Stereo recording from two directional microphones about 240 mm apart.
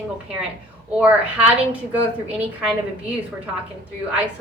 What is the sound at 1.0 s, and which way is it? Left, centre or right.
A woman's voice, centre.